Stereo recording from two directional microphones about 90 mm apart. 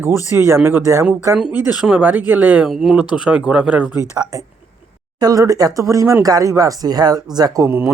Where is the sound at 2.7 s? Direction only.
5° right (ahead or behind).